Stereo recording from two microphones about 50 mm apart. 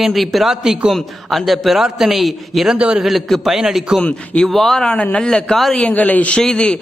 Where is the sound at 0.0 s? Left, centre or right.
Centre.